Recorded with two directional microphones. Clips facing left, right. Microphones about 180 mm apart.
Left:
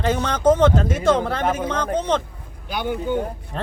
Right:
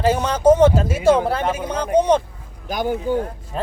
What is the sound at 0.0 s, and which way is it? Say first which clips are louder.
A man's voice: right 3 dB; 10° right (ahead or behind).